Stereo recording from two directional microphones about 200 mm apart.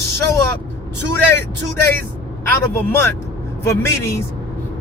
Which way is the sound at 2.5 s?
10° left (ahead or behind).